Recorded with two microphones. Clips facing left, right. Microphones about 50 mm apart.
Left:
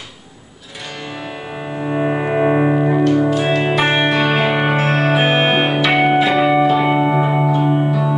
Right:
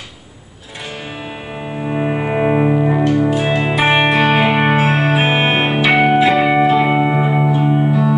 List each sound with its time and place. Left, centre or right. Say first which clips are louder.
1.8 s music: left 1 dB; centre
6.4 s music: right 1 dB; centre